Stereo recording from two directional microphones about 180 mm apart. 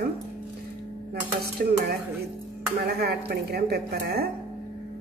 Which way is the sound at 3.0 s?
60° right (ahead or behind).